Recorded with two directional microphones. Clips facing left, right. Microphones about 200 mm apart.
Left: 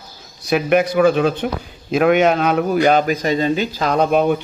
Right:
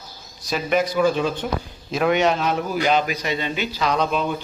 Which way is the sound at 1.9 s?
55° left (ahead or behind).